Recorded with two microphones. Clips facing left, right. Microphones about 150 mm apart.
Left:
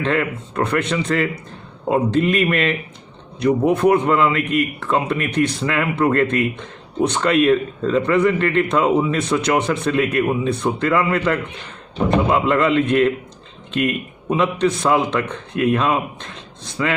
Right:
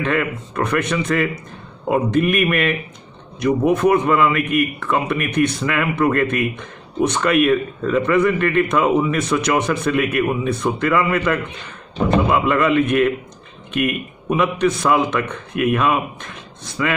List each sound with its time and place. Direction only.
0.0 s a man's voice: 30° left (ahead or behind)